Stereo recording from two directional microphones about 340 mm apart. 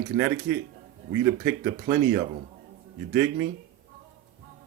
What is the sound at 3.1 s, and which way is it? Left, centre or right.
Speech, right.